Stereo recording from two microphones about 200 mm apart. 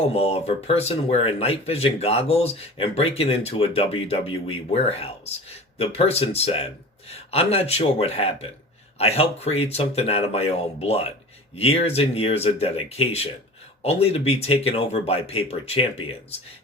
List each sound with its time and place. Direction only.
0.1 s speech: 30° left (ahead or behind)